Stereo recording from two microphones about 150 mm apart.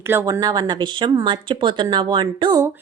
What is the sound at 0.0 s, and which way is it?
A woman's voice, 15° right (ahead or behind).